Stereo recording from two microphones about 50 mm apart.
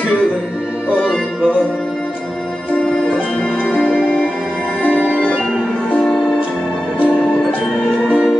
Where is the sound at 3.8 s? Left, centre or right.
Centre.